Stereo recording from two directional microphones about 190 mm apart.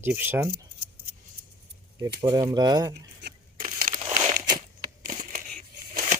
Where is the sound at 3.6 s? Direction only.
45° right (ahead or behind).